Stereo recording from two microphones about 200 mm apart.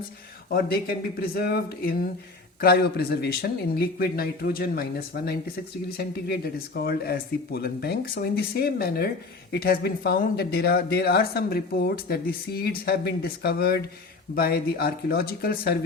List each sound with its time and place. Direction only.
0.5 s speech: 50° left (ahead or behind)